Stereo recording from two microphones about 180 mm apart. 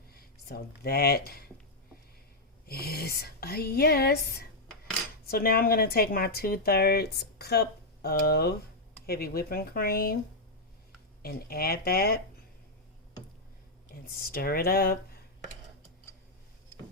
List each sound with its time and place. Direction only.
0.1 s a sound: 60° left (ahead or behind)
0.8 s a woman's voice: 60° left (ahead or behind)
2.6 s a woman's voice: 60° left (ahead or behind)
5.2 s a woman's voice: 60° left (ahead or behind)
11.2 s a woman's voice: 55° left (ahead or behind)
13.9 s speech: 55° left (ahead or behind)